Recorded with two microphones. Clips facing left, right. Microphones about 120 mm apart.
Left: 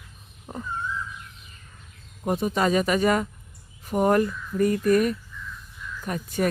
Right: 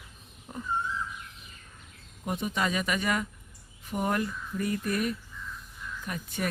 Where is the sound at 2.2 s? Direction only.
40° left (ahead or behind).